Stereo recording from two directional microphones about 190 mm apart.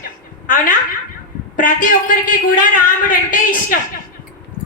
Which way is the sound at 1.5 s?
45° left (ahead or behind).